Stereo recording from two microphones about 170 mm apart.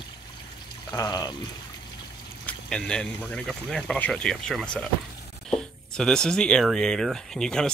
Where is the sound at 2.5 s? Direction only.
5° left (ahead or behind).